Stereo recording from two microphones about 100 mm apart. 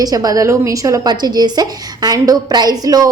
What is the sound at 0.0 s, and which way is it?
A woman's voice, 40° right (ahead or behind).